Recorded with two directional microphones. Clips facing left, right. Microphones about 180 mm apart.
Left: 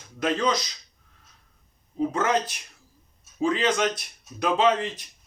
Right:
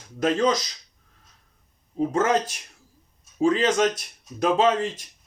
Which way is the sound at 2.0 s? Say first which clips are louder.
Right 2 dB; 40° right (ahead or behind).